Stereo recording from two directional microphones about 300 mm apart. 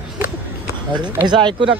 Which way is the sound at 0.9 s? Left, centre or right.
Centre.